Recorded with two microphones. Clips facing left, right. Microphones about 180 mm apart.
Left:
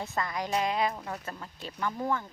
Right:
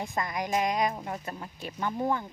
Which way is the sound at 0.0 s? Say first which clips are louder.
Right 1 dB; 15° right (ahead or behind).